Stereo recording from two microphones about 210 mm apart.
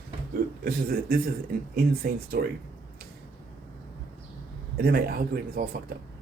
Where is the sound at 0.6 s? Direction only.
45° right (ahead or behind).